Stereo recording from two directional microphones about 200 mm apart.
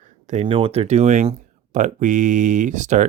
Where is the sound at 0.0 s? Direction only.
35° right (ahead or behind).